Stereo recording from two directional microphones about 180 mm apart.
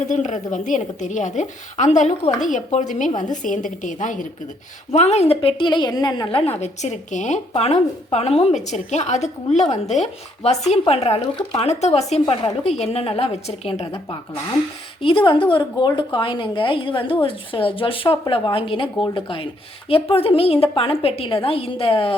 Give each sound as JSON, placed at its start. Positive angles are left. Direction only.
{"t": 0.1, "sound": "a woman's voice", "side_deg": 45}
{"t": 12.3, "sound": "speech", "side_deg": 20}
{"t": 12.6, "sound": "a woman's voice", "side_deg": 35}
{"t": 15.0, "sound": "a woman's voice", "side_deg": 30}